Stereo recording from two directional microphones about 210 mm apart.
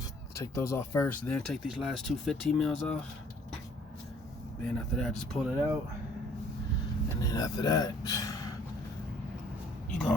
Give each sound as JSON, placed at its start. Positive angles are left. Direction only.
{"t": 0.3, "sound": "speech", "side_deg": 15}
{"t": 4.7, "sound": "speech", "side_deg": 5}
{"t": 7.2, "sound": "speech", "side_deg": 15}